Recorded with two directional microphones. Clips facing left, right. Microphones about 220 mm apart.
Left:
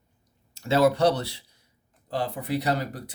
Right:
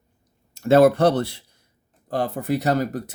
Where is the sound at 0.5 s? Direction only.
50° right (ahead or behind).